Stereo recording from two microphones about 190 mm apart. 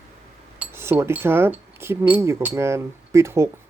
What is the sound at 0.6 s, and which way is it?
Speech, 10° right (ahead or behind).